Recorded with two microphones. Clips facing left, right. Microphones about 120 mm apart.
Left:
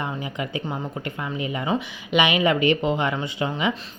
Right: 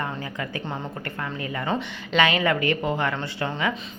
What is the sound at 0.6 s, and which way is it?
A woman's voice, 5° left (ahead or behind).